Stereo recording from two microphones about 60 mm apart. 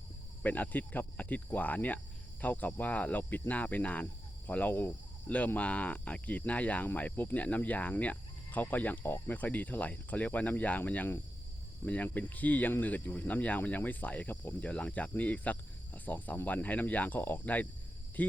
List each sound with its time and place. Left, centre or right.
0.4 s speech: left